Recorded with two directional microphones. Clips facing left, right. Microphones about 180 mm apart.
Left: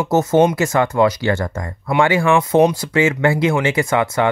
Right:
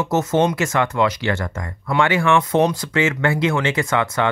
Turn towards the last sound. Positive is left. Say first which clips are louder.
# left 3 dB
turn(degrees=30)  # may be behind; listen again after turning